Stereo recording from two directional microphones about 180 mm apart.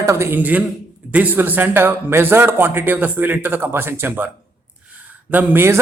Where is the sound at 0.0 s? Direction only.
15° right (ahead or behind).